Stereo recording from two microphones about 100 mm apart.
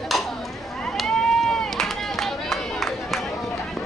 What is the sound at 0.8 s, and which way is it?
Run, 5° left (ahead or behind).